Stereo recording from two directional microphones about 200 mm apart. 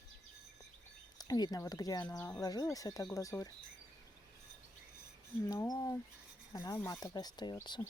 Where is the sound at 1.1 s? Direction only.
20° left (ahead or behind).